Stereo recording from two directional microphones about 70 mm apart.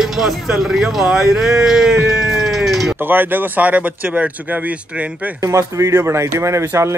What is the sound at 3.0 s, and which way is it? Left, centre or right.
Speech, right.